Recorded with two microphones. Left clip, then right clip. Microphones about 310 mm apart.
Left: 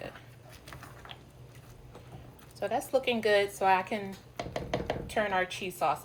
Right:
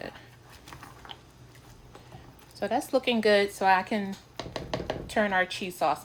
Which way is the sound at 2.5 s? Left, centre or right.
Right.